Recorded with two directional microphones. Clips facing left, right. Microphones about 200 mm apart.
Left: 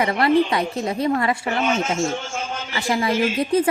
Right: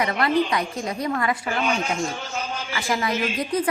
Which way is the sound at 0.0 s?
30° left (ahead or behind).